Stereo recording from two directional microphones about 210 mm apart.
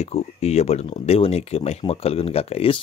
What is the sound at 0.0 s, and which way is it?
Speech, 30° left (ahead or behind).